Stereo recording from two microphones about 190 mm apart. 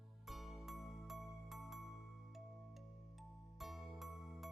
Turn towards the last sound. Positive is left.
turn(degrees=0)  # may be behind; listen again after turning